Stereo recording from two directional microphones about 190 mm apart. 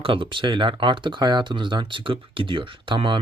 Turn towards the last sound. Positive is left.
turn(degrees=-25)  # may be behind; listen again after turning